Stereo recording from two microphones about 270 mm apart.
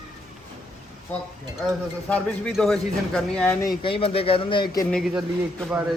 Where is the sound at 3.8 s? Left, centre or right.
Left.